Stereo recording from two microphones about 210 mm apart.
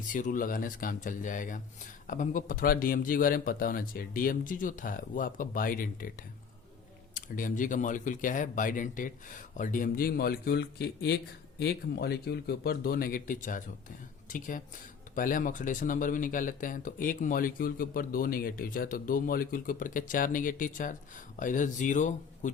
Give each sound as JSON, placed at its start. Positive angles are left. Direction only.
{"t": 0.1, "sound": "speech", "side_deg": 40}